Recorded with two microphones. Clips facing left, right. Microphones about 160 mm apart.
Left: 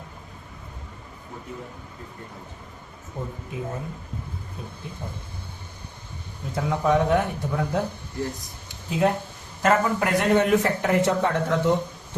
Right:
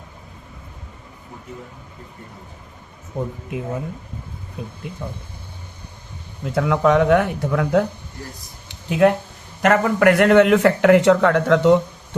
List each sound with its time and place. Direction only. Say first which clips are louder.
6.4 s speech: right 7 dB; 75° right (ahead or behind)
8.9 s a man's voice: right 7 dB; 70° right (ahead or behind)